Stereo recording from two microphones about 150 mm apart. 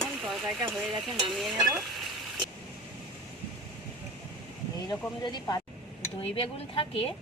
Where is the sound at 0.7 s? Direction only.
Centre (ahead or behind).